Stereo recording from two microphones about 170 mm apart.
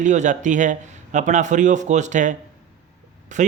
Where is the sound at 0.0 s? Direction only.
45° right (ahead or behind).